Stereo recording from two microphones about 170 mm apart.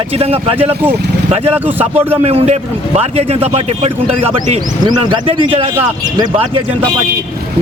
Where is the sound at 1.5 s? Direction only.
10° right (ahead or behind).